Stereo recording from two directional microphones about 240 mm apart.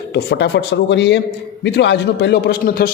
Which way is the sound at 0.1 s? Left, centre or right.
Left.